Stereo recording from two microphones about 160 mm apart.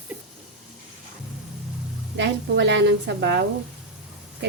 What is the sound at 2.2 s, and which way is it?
A woman's voice, 90° right.